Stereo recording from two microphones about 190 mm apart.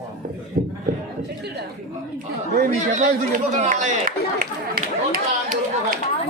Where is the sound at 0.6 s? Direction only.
50° right (ahead or behind).